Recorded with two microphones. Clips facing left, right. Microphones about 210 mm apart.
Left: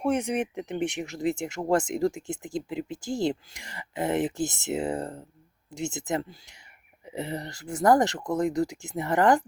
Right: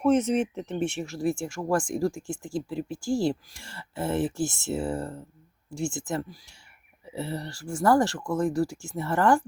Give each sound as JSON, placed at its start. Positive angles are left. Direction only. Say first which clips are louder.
{"t": 0.0, "sound": "speech", "louder": "right 4 dB", "side_deg": 15}